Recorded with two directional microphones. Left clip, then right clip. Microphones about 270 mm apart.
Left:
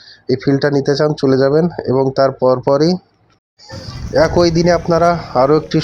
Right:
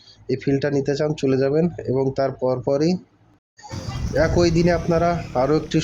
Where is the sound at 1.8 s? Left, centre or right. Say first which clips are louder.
Left 8 dB; centre.